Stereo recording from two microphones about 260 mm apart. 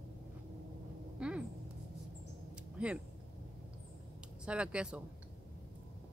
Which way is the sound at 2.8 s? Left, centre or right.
Centre.